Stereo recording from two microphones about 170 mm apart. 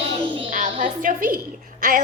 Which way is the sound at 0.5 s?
50° right (ahead or behind).